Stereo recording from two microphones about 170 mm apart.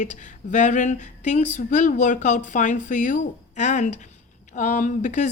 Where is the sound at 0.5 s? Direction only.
45° left (ahead or behind).